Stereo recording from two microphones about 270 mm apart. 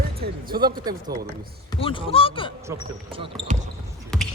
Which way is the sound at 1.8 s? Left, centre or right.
Centre.